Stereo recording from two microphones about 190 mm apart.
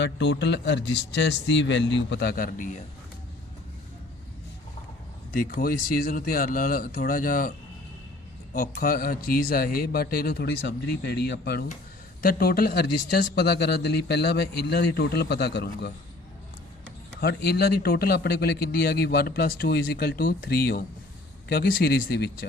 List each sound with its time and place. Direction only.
0.0 s speech: 65° left (ahead or behind); by 2.7 s 45° left (ahead or behind)
5.3 s a man's voice: 45° left (ahead or behind)
8.5 s a man's voice: 45° left (ahead or behind)
17.2 s a man's voice: 55° left (ahead or behind)